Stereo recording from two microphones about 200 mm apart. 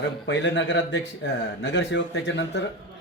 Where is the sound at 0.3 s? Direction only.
65° left (ahead or behind).